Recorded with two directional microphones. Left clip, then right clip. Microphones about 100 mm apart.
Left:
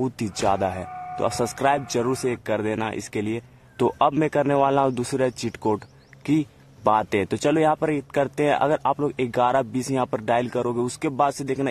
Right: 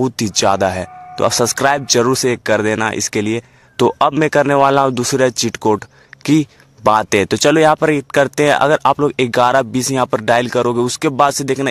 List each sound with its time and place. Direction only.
0.0 s speech: 25° right (ahead or behind)
0.5 s speech: 40° right (ahead or behind)
2.2 s speech: 45° right (ahead or behind)
6.2 s a sound: 40° right (ahead or behind)
7.1 s speech: 35° right (ahead or behind)